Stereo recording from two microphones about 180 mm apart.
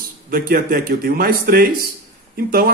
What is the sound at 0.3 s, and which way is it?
Speech, 50° right (ahead or behind).